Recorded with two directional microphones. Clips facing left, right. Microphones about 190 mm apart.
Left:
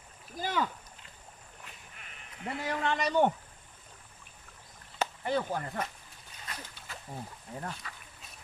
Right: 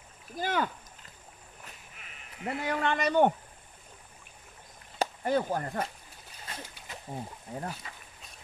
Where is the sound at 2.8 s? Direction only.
55° right (ahead or behind).